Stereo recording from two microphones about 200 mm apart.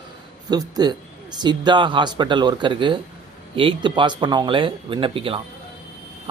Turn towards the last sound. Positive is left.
turn(degrees=-25)  # may be behind; listen again after turning